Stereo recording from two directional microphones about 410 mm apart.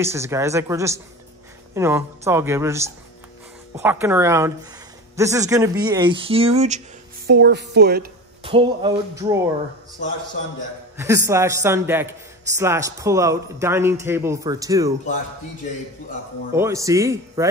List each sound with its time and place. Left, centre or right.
0.0 s a man's voice: centre
11.0 s a man's voice: centre
16.5 s a man's voice: centre